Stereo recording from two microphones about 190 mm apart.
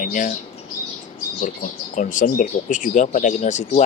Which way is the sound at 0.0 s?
45° left (ahead or behind).